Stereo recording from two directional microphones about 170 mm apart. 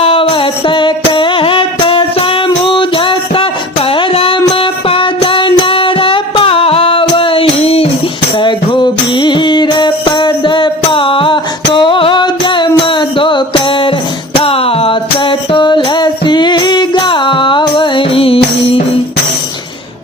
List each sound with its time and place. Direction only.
0.0 s music: 30° left (ahead or behind)